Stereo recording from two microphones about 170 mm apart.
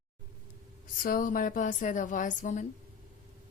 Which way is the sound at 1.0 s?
55° left (ahead or behind).